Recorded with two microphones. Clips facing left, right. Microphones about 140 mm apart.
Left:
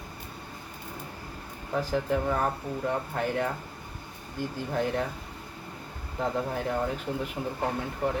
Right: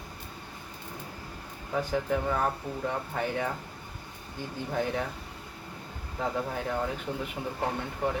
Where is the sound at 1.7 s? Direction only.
5° left (ahead or behind).